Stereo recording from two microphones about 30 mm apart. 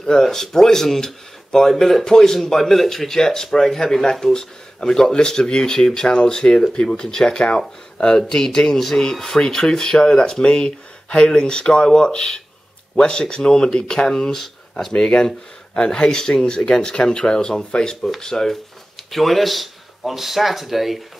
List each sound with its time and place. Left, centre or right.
0.2 s speech: centre
2.0 s speech: left
2.3 s speech: centre; by 16.1 s left
16.1 s speech: left
19.1 s speech: centre